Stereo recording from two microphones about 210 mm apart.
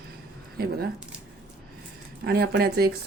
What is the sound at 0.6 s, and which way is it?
Speech, 45° right (ahead or behind).